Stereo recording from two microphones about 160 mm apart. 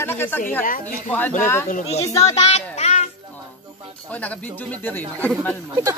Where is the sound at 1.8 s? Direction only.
40° left (ahead or behind).